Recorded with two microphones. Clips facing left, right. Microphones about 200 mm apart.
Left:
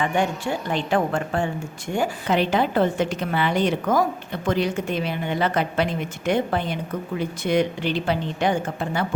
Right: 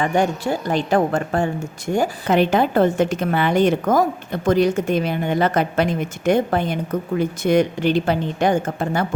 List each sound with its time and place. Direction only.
0.0 s a woman's voice: 40° right (ahead or behind)